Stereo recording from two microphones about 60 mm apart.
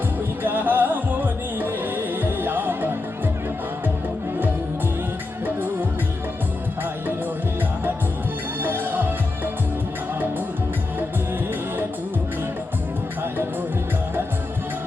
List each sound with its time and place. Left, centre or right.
0.4 s music: right
8.6 s music: right